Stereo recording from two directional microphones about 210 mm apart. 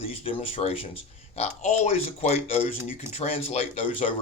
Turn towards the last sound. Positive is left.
turn(degrees=35)  # may be behind; listen again after turning